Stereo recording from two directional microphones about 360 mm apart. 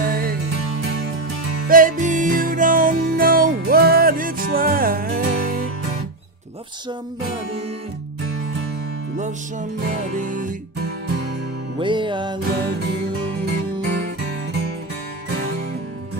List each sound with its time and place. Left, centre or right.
0.1 s music: right
1.7 s music: right
9.8 s music: right
11.8 s music: centre
13.8 s music: right